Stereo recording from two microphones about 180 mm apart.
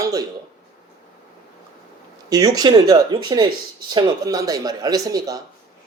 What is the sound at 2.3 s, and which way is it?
Speech, 20° right (ahead or behind).